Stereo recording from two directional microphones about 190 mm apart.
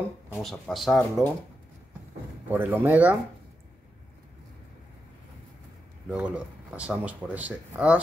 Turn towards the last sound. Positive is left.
turn(degrees=-10)  # may be behind; listen again after turning